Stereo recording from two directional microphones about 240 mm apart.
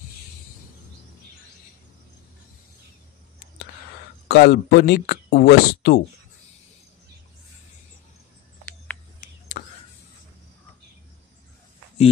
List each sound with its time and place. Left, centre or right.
4.3 s speech: left
9.5 s whispering: left